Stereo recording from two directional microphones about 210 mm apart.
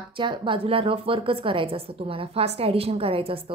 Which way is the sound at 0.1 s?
25° right (ahead or behind).